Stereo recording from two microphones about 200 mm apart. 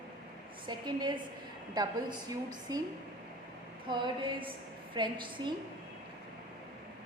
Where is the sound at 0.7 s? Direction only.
20° right (ahead or behind).